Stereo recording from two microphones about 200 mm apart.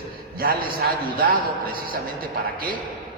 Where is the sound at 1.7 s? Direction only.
45° right (ahead or behind).